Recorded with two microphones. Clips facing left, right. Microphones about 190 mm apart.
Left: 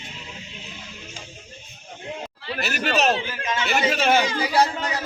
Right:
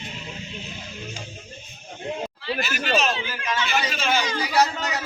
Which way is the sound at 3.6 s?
50° left (ahead or behind).